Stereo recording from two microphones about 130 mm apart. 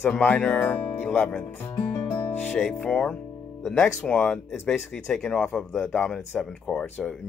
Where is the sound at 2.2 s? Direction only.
15° left (ahead or behind).